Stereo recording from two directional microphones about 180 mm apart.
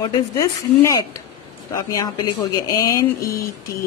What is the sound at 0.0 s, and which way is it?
Speech, 20° left (ahead or behind).